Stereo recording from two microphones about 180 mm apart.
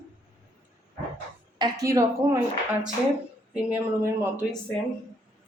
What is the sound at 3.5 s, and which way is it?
Speech, 10° right (ahead or behind).